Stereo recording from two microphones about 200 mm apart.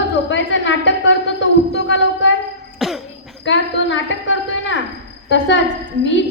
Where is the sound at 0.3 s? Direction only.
65° left (ahead or behind).